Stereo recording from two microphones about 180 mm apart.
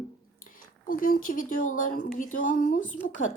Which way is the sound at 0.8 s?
50° left (ahead or behind).